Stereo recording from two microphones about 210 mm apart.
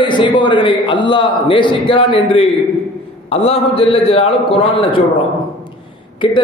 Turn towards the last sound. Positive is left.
turn(degrees=25)  # may be behind; listen again after turning